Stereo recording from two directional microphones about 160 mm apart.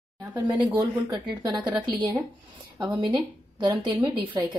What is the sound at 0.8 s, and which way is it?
Speech, 25° right (ahead or behind).